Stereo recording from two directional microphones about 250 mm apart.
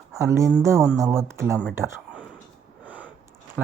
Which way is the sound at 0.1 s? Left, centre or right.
Centre.